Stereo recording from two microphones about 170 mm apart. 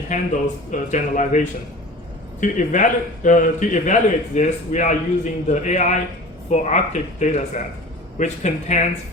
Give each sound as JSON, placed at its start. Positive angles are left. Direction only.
{"t": 0.1, "sound": "a man's voice", "side_deg": 45}
{"t": 2.4, "sound": "a man's voice", "side_deg": 50}